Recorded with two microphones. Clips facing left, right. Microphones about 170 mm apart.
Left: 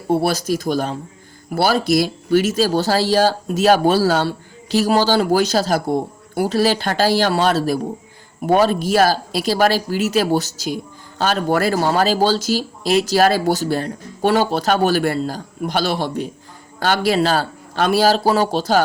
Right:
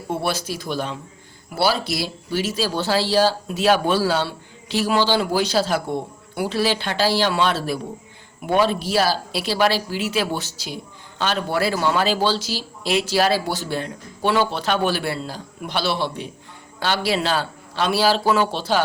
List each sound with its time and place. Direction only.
0.1 s speech: 40° left (ahead or behind)